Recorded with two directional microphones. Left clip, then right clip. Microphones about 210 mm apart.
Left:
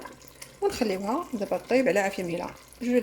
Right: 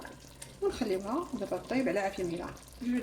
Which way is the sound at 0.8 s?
45° left (ahead or behind).